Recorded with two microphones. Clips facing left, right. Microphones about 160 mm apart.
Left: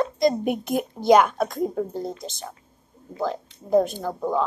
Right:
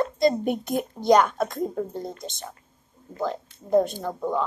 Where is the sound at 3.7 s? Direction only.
5° left (ahead or behind).